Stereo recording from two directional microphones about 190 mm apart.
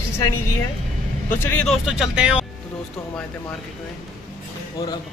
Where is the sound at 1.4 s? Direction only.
10° left (ahead or behind).